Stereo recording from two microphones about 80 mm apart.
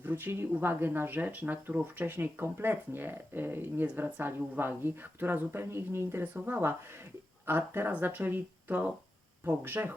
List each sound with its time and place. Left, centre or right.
0.0 s speech: right